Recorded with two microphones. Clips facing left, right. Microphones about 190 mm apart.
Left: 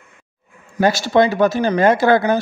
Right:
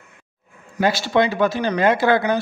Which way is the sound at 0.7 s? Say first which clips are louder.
Left 4 dB; 45° left (ahead or behind).